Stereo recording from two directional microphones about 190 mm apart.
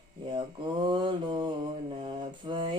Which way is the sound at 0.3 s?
25° right (ahead or behind).